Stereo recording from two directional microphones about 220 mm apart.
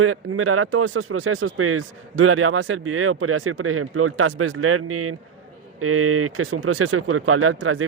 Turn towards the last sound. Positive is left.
turn(degrees=-70)  # may be behind; listen again after turning